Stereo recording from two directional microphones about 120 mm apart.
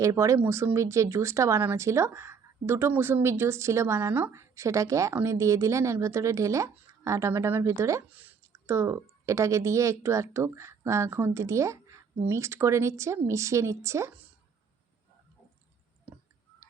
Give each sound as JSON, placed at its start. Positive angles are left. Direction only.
{"t": 0.0, "sound": "speech", "side_deg": -25}